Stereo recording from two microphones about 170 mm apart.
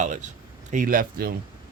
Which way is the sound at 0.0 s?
45° right (ahead or behind).